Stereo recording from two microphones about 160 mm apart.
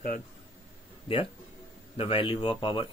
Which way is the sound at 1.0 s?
35° left (ahead or behind).